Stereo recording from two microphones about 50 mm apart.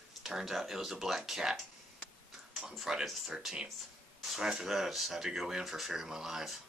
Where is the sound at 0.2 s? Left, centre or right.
Centre.